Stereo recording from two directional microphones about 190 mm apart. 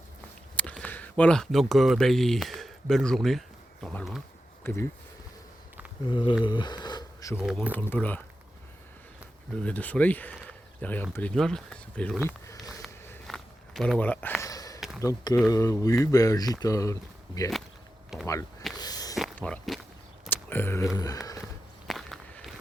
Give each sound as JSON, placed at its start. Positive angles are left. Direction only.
{"t": 0.5, "sound": "speech", "side_deg": 5}
{"t": 4.6, "sound": "speech", "side_deg": 10}
{"t": 6.1, "sound": "speech", "side_deg": 25}
{"t": 7.3, "sound": "speech", "side_deg": -5}
{"t": 7.7, "sound": "speech", "side_deg": 10}
{"t": 9.6, "sound": "speech", "side_deg": 10}
{"t": 12.8, "sound": "a sound", "side_deg": 0}
{"t": 15.0, "sound": "speech", "side_deg": 20}
{"t": 18.1, "sound": "a sound", "side_deg": 0}
{"t": 18.8, "sound": "a sound", "side_deg": 20}
{"t": 19.4, "sound": "walk", "side_deg": 5}
{"t": 20.3, "sound": "a sound", "side_deg": 10}
{"t": 21.8, "sound": "walk", "side_deg": 0}